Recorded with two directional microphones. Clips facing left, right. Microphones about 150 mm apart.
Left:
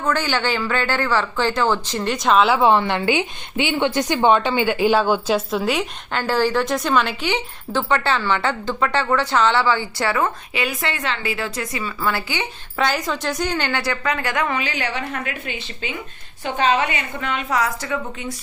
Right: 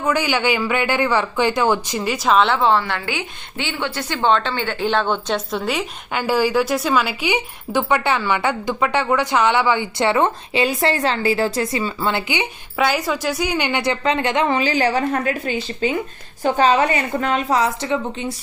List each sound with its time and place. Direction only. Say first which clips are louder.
0.0 s speech: right 2 dB; 10° right (ahead or behind)
2.6 s a woman's voice: left 2 dB; 15° left (ahead or behind); by 5.8 s centre (ahead or behind)
6.1 s speech: right 2 dB; 10° right (ahead or behind)
12.8 s a woman's voice: right 2 dB; 5° right (ahead or behind); by 17.6 s 40° right (ahead or behind)
17.6 s a woman's voice: right 3 dB; 25° right (ahead or behind)